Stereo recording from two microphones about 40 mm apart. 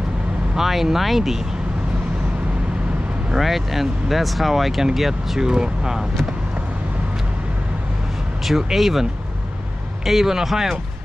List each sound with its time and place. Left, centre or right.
0.6 s speech: centre
3.3 s speech: centre
5.5 s speech: centre
8.5 s speech: centre
10.0 s speech: centre